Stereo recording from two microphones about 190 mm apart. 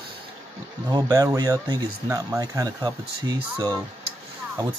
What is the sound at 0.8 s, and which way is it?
Speech, 20° right (ahead or behind).